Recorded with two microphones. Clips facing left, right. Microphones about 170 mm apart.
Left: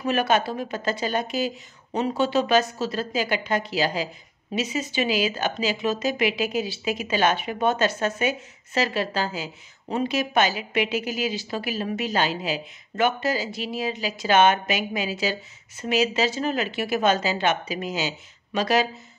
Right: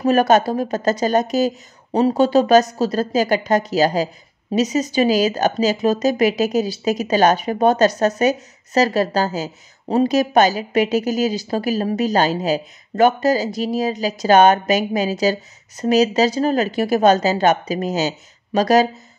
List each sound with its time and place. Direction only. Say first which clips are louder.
0.0 s speech: right 8 dB; 40° right (ahead or behind)